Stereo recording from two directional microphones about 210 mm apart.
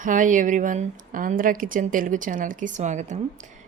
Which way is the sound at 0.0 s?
40° right (ahead or behind).